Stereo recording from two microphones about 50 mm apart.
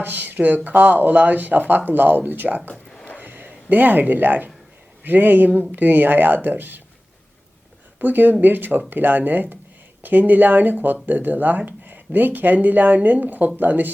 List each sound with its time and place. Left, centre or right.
0.0 s speech: right
3.2 s a sound: right
5.0 s speech: right
7.9 s speech: right